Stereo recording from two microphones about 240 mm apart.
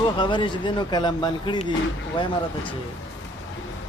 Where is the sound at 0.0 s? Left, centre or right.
Centre.